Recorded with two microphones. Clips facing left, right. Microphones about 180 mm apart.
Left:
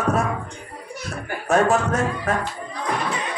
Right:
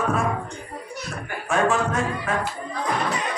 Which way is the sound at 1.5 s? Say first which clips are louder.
Left 4 dB; 40° left (ahead or behind).